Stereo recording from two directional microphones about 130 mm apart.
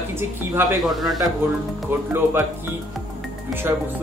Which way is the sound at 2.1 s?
20° right (ahead or behind).